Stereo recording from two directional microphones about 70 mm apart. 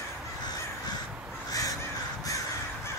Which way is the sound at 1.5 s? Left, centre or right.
Left.